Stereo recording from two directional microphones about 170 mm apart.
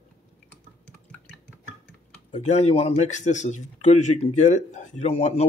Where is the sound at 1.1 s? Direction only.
5° left (ahead or behind).